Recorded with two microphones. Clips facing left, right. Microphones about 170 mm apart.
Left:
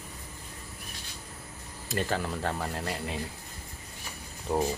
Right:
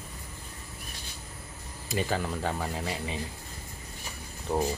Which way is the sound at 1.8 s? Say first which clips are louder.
Right 1 dB; centre (ahead or behind).